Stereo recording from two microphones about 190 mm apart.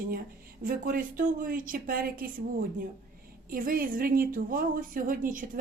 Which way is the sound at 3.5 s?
50° right (ahead or behind).